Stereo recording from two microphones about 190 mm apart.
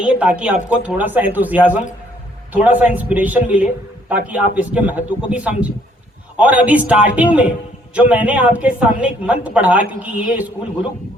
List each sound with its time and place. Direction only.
0.0 s speech: 5° right (ahead or behind)